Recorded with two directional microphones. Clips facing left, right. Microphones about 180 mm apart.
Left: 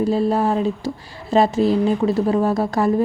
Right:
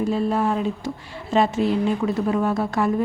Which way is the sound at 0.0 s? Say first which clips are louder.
Left 3 dB; 35° left (ahead or behind).